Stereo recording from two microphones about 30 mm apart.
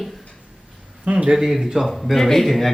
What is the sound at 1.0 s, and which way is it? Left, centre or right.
Speech, right.